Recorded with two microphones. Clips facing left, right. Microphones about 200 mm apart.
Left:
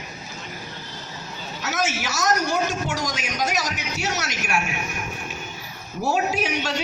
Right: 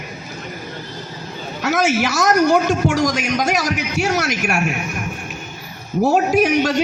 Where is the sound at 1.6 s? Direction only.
60° right (ahead or behind).